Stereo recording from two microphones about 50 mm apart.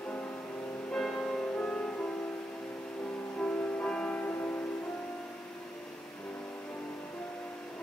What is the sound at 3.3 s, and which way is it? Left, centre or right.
Music, left.